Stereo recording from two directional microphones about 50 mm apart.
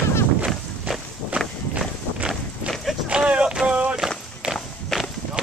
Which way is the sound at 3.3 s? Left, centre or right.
Centre.